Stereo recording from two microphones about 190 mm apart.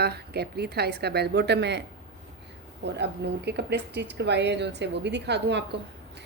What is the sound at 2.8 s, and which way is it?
Speech, 65° right (ahead or behind).